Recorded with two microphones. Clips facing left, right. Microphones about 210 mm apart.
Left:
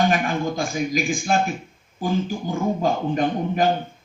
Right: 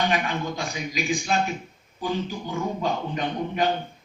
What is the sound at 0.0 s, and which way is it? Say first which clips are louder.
Speech: left 4 dB; 45° left (ahead or behind).